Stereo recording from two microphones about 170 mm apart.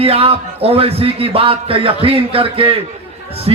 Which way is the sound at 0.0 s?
35° right (ahead or behind).